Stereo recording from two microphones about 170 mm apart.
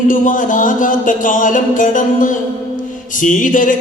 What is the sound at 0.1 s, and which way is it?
Mantra, 50° left (ahead or behind).